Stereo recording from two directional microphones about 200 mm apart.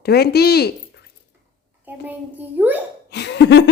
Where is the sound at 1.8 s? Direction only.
10° right (ahead or behind).